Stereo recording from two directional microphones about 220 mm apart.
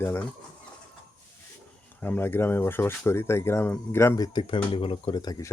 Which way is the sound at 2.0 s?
10° left (ahead or behind).